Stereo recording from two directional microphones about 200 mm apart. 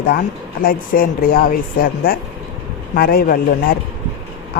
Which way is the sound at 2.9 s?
50° left (ahead or behind).